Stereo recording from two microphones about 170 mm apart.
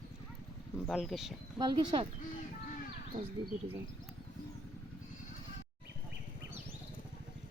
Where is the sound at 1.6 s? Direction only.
30° right (ahead or behind).